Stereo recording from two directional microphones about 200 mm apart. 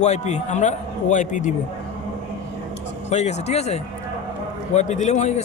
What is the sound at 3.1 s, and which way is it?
A man's voice, 35° left (ahead or behind).